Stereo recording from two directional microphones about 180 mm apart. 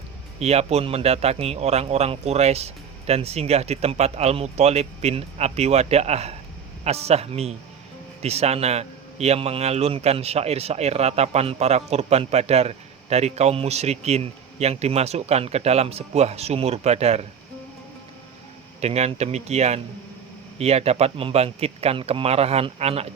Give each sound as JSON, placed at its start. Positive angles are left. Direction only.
{"t": 0.3, "sound": "a man's voice", "side_deg": -35}
{"t": 18.8, "sound": "a man's voice", "side_deg": -35}